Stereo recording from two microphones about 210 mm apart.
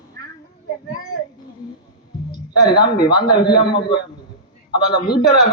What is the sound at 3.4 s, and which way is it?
Speech, 50° left (ahead or behind).